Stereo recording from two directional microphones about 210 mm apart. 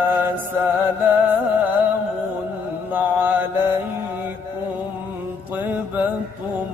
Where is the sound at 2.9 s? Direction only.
10° right (ahead or behind).